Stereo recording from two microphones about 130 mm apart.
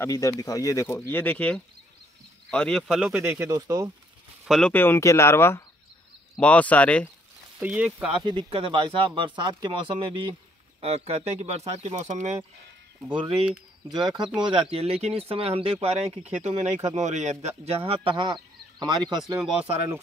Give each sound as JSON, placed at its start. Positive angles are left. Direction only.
{"t": 0.0, "sound": "speech", "side_deg": 25}
{"t": 3.2, "sound": "speech", "side_deg": -20}
{"t": 4.5, "sound": "speech", "side_deg": 5}
{"t": 4.7, "sound": "speech", "side_deg": 20}
{"t": 7.5, "sound": "speech", "side_deg": -10}
{"t": 8.2, "sound": "speech", "side_deg": -35}
{"t": 10.8, "sound": "speech", "side_deg": -50}
{"t": 13.1, "sound": "speech", "side_deg": -40}
{"t": 16.4, "sound": "speech", "side_deg": -65}